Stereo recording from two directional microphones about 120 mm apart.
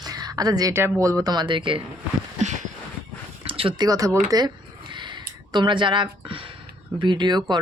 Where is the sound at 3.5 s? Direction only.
50° right (ahead or behind).